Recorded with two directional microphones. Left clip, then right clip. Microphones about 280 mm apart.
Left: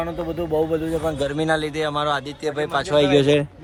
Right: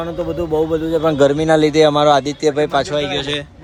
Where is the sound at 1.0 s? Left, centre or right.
Right.